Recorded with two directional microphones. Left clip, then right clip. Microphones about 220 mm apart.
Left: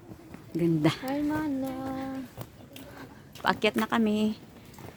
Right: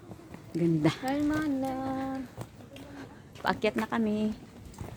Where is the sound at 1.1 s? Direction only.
30° right (ahead or behind).